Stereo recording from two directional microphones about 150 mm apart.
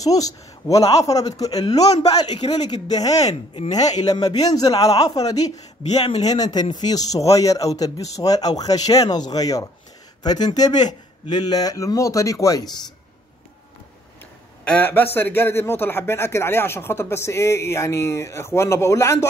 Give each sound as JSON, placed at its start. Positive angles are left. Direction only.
{"t": 0.0, "sound": "speech", "side_deg": 25}
{"t": 1.8, "sound": "a man's voice", "side_deg": 45}
{"t": 2.7, "sound": "speech", "side_deg": 25}
{"t": 14.6, "sound": "a man's voice", "side_deg": 10}